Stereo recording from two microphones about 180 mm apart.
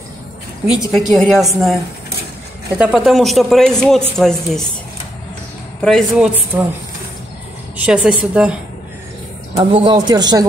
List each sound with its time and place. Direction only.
0.7 s speech: 5° right (ahead or behind)
2.8 s speech: 5° right (ahead or behind)
5.8 s speech: centre (ahead or behind)
6.5 s a woman's voice: 15° right (ahead or behind)
7.7 s a woman's voice: 5° right (ahead or behind)
9.6 s a man's voice: 30° right (ahead or behind)